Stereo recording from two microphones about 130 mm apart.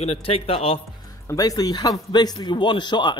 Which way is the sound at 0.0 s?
50° left (ahead or behind).